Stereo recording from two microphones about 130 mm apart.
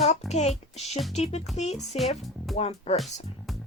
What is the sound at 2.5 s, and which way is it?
Speech, 55° left (ahead or behind).